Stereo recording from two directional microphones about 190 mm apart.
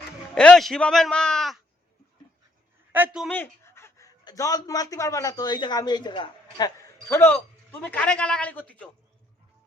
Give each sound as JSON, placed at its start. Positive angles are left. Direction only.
{"t": 0.3, "sound": "a man's voice", "side_deg": 5}
{"t": 2.9, "sound": "a man's voice", "side_deg": -5}
{"t": 3.2, "sound": "speech", "side_deg": 10}